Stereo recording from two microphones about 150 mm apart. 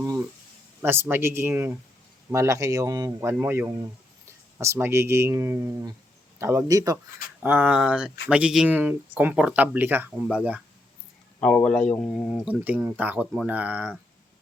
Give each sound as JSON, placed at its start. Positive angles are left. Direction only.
{"t": 0.8, "sound": "speech", "side_deg": -15}
{"t": 7.4, "sound": "speech", "side_deg": -10}
{"t": 11.3, "sound": "speech", "side_deg": 10}
{"t": 12.5, "sound": "speech", "side_deg": -10}